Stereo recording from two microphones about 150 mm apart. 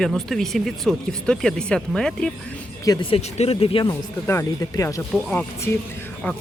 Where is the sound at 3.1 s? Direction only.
40° left (ahead or behind).